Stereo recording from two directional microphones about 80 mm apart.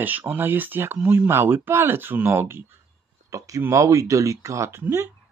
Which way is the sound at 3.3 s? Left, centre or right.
Right.